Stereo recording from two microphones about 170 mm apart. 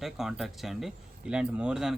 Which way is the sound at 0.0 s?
Centre (ahead or behind).